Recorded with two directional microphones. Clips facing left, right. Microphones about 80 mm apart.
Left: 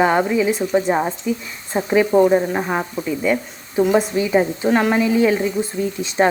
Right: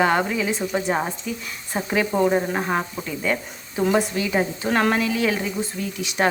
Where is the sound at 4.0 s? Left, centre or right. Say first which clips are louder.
Left 4 dB; left.